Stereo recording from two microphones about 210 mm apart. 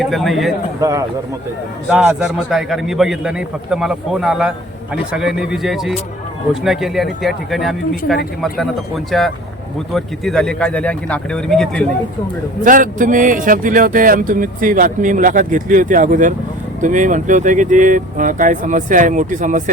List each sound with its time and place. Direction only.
0.0 s a man's voice: centre (ahead or behind)
0.8 s a man's voice: 15° right (ahead or behind)
1.9 s a man's voice: 5° right (ahead or behind)
12.6 s speech: 40° right (ahead or behind)